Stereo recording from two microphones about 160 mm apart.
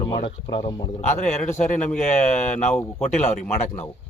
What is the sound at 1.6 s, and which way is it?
Speech, 50° left (ahead or behind).